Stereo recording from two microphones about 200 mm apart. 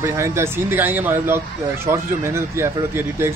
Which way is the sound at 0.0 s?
15° right (ahead or behind).